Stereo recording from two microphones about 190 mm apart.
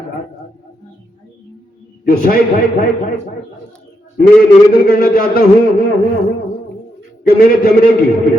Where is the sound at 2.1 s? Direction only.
50° left (ahead or behind).